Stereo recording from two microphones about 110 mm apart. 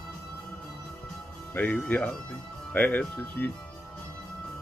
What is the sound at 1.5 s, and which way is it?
Speech, 15° left (ahead or behind).